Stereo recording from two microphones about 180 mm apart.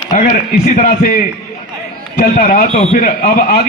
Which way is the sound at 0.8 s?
50° left (ahead or behind).